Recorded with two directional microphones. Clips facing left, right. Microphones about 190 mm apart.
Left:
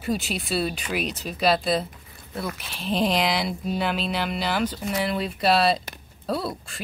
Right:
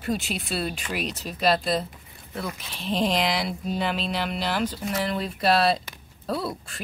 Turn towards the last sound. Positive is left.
turn(degrees=0)  # may be behind; listen again after turning